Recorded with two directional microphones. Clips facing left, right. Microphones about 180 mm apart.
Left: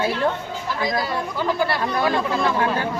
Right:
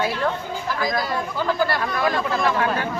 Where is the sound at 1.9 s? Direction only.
30° left (ahead or behind).